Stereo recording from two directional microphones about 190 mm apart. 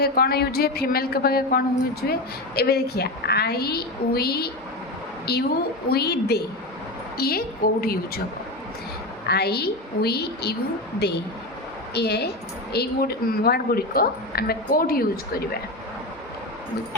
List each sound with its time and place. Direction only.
0.0 s a woman's voice: 55° left (ahead or behind)
9.2 s a woman's voice: 60° left (ahead or behind)
11.9 s a woman's voice: 60° left (ahead or behind)